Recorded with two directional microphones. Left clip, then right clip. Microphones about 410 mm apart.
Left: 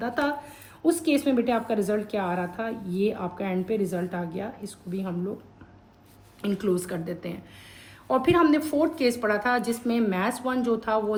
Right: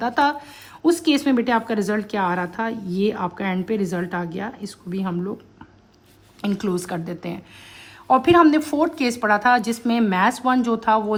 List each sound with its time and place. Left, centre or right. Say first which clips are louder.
0.0 s a woman's voice: right 7 dB; centre
6.4 s a woman's voice: right 2 dB; centre